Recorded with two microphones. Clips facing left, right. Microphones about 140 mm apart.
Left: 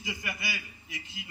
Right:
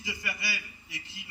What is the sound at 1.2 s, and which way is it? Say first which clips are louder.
Speech: left 3 dB; 90° left.